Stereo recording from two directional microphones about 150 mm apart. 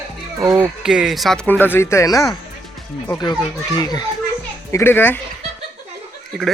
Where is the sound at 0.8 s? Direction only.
5° right (ahead or behind); by 4.1 s 25° left (ahead or behind).